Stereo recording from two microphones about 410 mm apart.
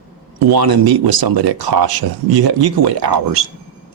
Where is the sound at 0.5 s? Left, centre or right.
Right.